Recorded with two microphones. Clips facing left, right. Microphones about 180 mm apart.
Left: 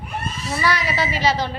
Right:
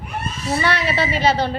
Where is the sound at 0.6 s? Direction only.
30° right (ahead or behind).